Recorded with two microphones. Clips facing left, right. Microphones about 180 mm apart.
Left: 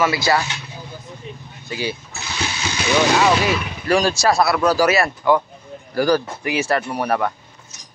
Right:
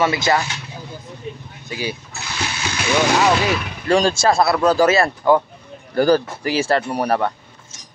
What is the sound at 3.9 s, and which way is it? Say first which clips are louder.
A man's voice: right 1 dB; 25° right (ahead or behind).